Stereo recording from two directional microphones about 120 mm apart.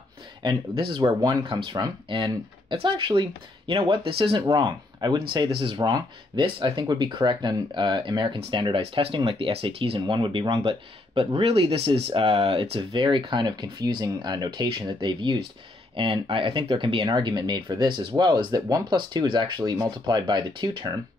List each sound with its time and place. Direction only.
0.4 s speech: 40° right (ahead or behind)